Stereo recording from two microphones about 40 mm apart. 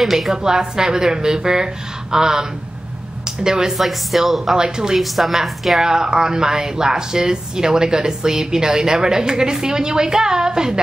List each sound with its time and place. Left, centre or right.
0.0 s a woman's voice: centre
3.4 s a woman's voice: centre
3.7 s speech: centre
4.5 s a woman's voice: centre
5.1 s a woman's voice: centre